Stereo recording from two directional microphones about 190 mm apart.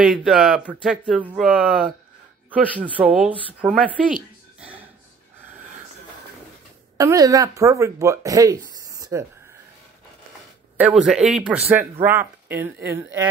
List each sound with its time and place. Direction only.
0.0 s speech: centre (ahead or behind)
4.6 s a sound: 5° right (ahead or behind)
7.0 s speech: 15° right (ahead or behind)
10.8 s speech: 5° right (ahead or behind)